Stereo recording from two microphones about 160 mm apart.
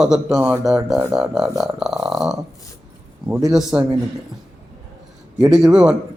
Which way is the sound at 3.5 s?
5° right (ahead or behind).